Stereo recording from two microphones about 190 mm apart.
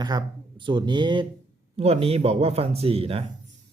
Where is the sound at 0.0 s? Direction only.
20° right (ahead or behind).